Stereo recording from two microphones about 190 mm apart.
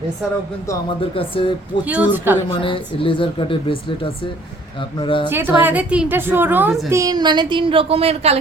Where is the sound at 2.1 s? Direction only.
10° right (ahead or behind).